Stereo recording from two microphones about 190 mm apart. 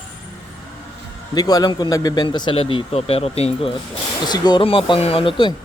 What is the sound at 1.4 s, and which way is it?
A man's voice, 20° left (ahead or behind).